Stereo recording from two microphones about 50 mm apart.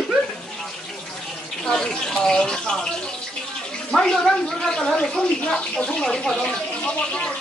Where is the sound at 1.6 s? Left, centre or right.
Centre.